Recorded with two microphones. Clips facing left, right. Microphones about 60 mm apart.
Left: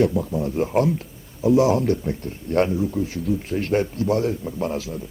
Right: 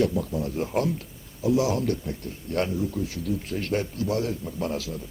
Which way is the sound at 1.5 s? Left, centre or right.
Left.